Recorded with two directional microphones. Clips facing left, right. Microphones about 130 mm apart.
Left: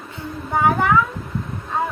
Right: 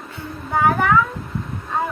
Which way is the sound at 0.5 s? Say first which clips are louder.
Even; 15° left (ahead or behind).